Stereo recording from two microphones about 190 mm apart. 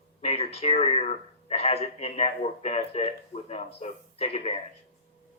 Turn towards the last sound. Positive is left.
turn(degrees=35)  # may be behind; listen again after turning